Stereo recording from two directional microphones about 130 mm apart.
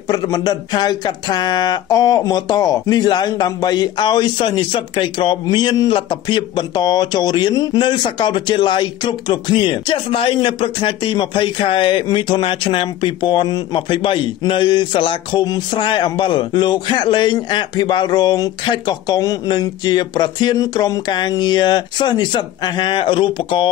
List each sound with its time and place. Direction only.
0.1 s speech: 30° left (ahead or behind)